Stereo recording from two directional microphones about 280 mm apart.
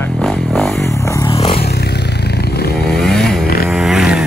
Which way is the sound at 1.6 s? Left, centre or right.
Left.